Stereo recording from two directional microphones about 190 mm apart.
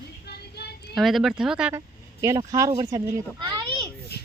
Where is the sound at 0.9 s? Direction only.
Centre (ahead or behind).